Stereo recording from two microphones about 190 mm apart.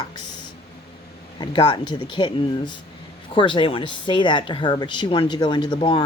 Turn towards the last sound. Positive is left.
turn(degrees=25)  # may be behind; listen again after turning